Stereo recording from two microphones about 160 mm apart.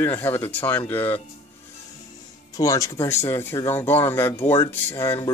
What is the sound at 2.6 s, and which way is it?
Speech, 20° left (ahead or behind).